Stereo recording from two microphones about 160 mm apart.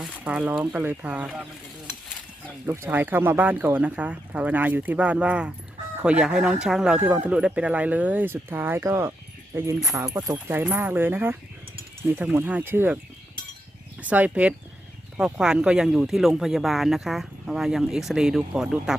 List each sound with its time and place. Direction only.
0.0 s speech: 10° right (ahead or behind)
2.6 s speech: 10° right (ahead or behind)
10.5 s speech: 10° right (ahead or behind)
14.0 s speech: 10° right (ahead or behind)